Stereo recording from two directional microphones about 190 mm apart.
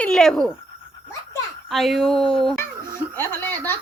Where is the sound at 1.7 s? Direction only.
Centre (ahead or behind).